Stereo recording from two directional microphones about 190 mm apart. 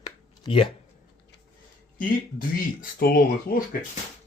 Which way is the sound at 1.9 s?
45° left (ahead or behind).